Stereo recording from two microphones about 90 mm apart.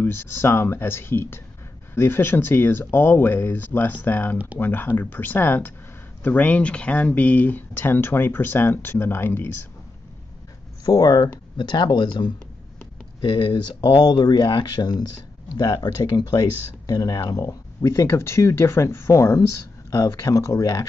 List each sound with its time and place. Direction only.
0.0 s speech: 25° left (ahead or behind)
10.9 s speech: 45° left (ahead or behind)